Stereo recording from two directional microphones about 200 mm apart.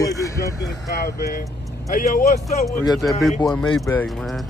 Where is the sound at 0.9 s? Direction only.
50° left (ahead or behind).